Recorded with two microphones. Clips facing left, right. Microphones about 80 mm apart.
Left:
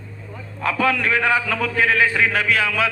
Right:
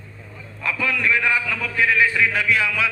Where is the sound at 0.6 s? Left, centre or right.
Left.